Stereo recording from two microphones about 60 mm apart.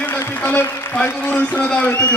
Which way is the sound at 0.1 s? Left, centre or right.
Left.